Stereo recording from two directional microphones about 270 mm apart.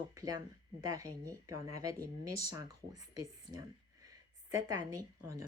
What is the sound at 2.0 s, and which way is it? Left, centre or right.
Speech, right.